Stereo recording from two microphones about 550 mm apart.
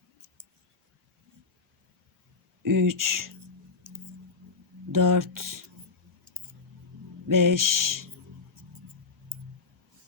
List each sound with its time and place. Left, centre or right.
2.6 s speech: right
4.9 s speech: right
7.3 s speech: right